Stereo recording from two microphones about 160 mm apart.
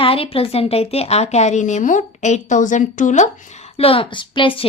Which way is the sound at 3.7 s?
35° left (ahead or behind).